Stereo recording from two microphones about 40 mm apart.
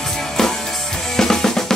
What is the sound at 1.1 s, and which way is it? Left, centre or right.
Drum kit, centre.